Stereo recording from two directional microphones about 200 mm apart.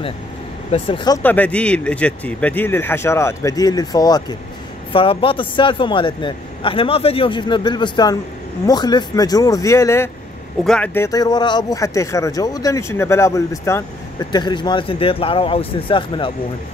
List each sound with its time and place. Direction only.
0.7 s speech: 30° left (ahead or behind)
1.2 s speech: 10° left (ahead or behind); by 16.3 s 25° left (ahead or behind)